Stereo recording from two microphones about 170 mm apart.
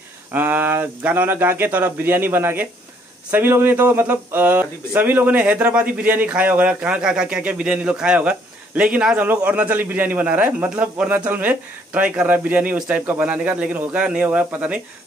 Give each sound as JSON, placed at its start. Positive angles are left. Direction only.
{"t": 0.3, "sound": "speech", "side_deg": -10}